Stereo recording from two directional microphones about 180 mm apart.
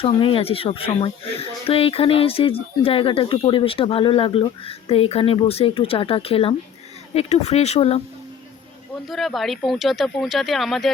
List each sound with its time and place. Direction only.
0.0 s speech: 30° left (ahead or behind)
9.0 s speech: centre (ahead or behind)